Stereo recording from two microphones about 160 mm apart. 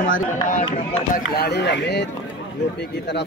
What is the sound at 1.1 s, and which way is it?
Speech, 80° left.